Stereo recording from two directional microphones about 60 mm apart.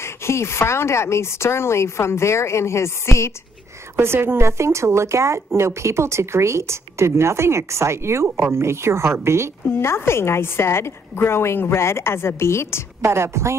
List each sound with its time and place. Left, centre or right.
0.0 s speech: left
3.9 s speech: right
9.7 s speech: left
13.0 s speech: right